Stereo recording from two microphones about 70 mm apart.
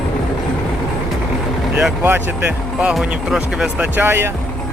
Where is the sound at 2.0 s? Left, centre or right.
Right.